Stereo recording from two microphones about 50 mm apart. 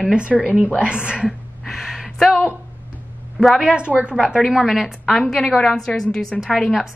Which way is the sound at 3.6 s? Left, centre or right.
Centre.